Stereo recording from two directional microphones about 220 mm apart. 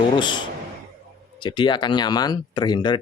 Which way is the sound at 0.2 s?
20° left (ahead or behind).